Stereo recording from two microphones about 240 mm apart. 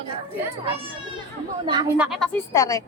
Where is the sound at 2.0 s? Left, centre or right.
Centre.